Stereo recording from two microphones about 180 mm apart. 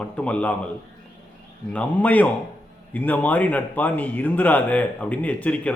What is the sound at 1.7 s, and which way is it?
Speech, 10° left (ahead or behind).